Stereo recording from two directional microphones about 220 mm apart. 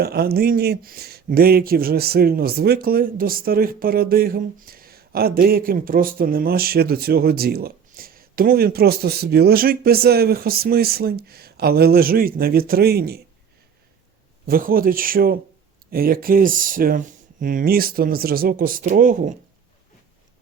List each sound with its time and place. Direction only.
0.0 s speech: 45° right (ahead or behind)
14.4 s speech: 40° right (ahead or behind)